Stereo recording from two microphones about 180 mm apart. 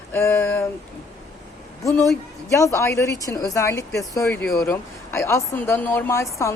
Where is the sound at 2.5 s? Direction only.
15° left (ahead or behind).